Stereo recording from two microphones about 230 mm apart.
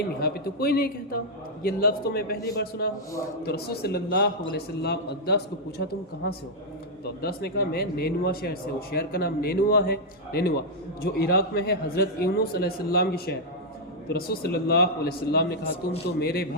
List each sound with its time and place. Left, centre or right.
0.2 s a man's voice: left